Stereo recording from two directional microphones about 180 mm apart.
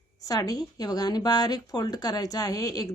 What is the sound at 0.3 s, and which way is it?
A woman's voice, 20° left (ahead or behind).